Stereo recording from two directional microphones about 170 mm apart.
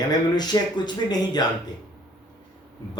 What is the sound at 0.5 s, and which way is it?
Speech, 25° left (ahead or behind).